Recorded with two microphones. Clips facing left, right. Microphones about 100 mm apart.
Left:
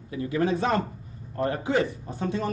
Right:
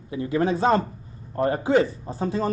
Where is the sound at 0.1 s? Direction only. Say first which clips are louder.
Right 2 dB; 30° right (ahead or behind).